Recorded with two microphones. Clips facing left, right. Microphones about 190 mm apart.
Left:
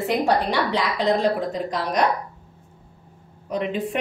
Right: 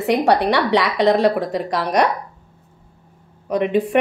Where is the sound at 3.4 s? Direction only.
65° right (ahead or behind).